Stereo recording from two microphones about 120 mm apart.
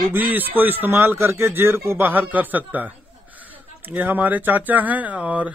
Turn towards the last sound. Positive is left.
turn(degrees=-10)  # may be behind; listen again after turning